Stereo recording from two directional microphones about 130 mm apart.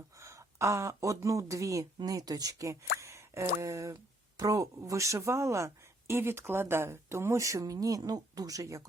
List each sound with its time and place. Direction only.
0.2 s speech: 25° right (ahead or behind)